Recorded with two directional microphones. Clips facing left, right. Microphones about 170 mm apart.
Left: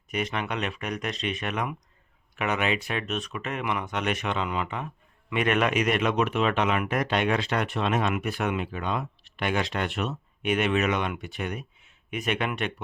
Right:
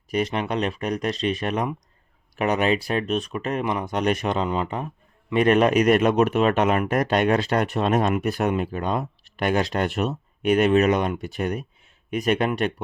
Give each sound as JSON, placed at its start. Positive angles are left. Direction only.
{"t": 0.1, "sound": "speech", "side_deg": -35}